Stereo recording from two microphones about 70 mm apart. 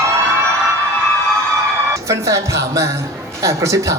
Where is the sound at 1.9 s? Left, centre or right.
Right.